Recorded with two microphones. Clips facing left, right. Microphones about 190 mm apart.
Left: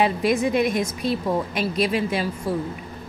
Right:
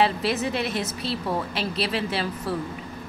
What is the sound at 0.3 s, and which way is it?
Speech, 15° left (ahead or behind).